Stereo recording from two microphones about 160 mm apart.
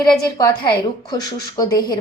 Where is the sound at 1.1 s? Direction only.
25° left (ahead or behind).